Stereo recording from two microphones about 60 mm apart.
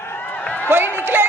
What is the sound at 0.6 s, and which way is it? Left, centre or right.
Speech, right.